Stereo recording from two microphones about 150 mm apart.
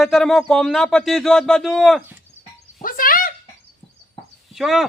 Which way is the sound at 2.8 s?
65° left (ahead or behind).